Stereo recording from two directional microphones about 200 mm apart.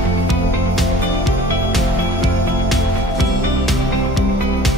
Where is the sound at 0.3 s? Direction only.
Centre (ahead or behind).